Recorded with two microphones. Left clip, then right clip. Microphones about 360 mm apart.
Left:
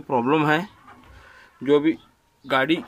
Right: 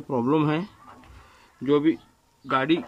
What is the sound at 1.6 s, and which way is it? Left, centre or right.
Speech, left.